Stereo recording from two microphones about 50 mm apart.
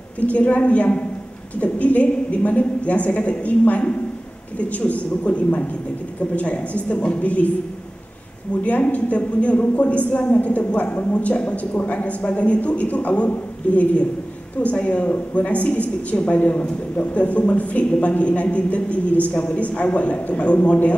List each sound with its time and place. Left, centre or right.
0.3 s a woman's voice: left
8.5 s a woman's voice: left
14.6 s a woman's voice: left